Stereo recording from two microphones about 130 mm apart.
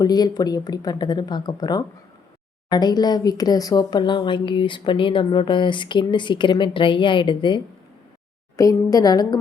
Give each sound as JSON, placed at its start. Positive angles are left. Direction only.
{"t": 0.0, "sound": "speech", "side_deg": 30}
{"t": 8.5, "sound": "a woman's voice", "side_deg": 25}